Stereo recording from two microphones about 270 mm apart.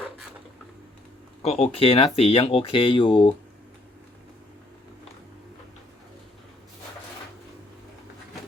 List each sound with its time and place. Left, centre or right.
1.4 s speech: left